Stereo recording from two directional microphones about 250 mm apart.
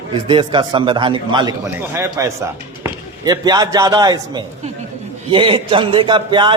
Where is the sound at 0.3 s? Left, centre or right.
Centre.